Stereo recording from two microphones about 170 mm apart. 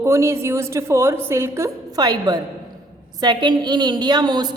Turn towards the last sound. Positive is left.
turn(degrees=-25)  # may be behind; listen again after turning